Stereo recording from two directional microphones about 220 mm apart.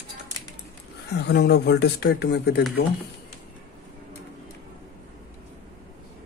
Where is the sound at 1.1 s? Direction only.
50° left (ahead or behind).